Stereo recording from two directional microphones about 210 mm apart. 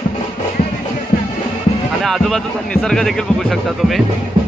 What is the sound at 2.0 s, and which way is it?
Speech, centre (ahead or behind).